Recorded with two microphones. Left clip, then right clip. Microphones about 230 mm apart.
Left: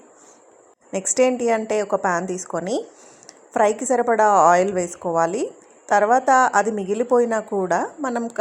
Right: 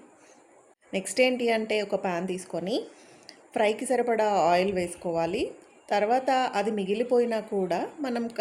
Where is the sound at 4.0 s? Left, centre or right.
Centre.